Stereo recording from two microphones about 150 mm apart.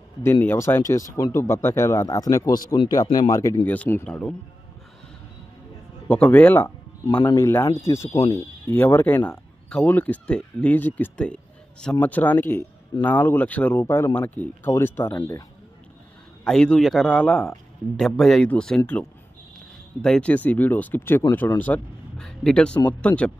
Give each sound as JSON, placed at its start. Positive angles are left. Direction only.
{"t": 0.2, "sound": "speech", "side_deg": 15}
{"t": 3.6, "sound": "speech", "side_deg": 10}
{"t": 6.0, "sound": "speech", "side_deg": 10}
{"t": 7.1, "sound": "speech", "side_deg": 25}
{"t": 16.4, "sound": "a man's voice", "side_deg": 5}